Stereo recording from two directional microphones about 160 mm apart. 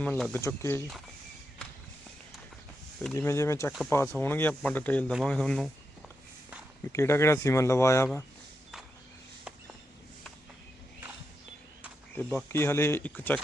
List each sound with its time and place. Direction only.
0.0 s speech: 5° left (ahead or behind)
0.4 s speech: 15° left (ahead or behind)
3.2 s speech: 15° left (ahead or behind)
6.8 s speech: 15° left (ahead or behind)
12.1 s speech: 10° left (ahead or behind)